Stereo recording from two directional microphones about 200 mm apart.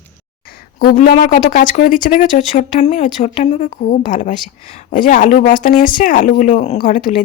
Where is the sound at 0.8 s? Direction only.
45° left (ahead or behind).